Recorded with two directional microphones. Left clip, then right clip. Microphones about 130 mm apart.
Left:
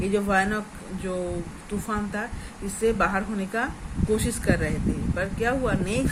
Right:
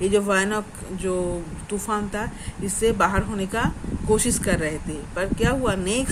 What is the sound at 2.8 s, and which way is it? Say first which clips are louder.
Speech: right 3 dB; 90° right.